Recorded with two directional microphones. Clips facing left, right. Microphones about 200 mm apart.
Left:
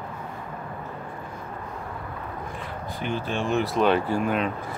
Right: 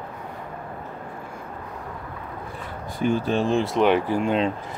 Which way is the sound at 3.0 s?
40° right (ahead or behind).